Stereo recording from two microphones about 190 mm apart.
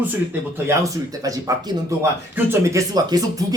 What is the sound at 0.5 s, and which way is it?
Speech, 15° right (ahead or behind).